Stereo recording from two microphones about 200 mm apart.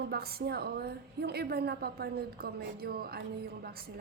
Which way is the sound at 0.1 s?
50° right (ahead or behind).